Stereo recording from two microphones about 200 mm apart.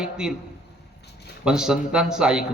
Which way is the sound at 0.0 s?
5° right (ahead or behind).